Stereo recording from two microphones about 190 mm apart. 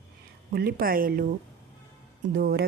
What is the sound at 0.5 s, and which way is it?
Speech, 55° right (ahead or behind).